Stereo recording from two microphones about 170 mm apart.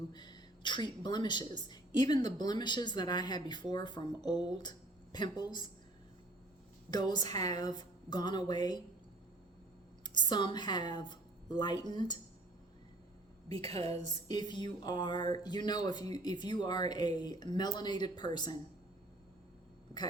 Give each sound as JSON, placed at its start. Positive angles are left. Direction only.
{"t": 0.1, "sound": "speech", "side_deg": 25}
{"t": 6.9, "sound": "speech", "side_deg": 25}
{"t": 10.0, "sound": "a woman's voice", "side_deg": 25}
{"t": 13.5, "sound": "a woman's voice", "side_deg": -35}
{"t": 14.3, "sound": "speech", "side_deg": 25}